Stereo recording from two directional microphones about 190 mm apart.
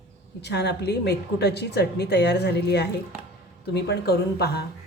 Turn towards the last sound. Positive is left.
turn(degrees=55)  # may be behind; listen again after turning